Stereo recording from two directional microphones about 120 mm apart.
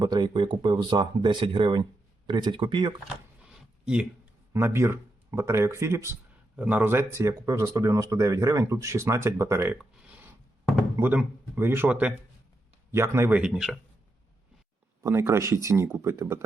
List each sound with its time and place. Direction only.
0.0 s speech: 40° right (ahead or behind)
3.4 s a sound: 5° right (ahead or behind)
4.5 s speech: 20° right (ahead or behind)
6.6 s speech: 10° right (ahead or behind)
10.9 s a man's voice: 15° right (ahead or behind)
12.9 s speech: 20° right (ahead or behind)
13.4 s a man's voice: 5° right (ahead or behind)
15.0 s speech: 20° right (ahead or behind)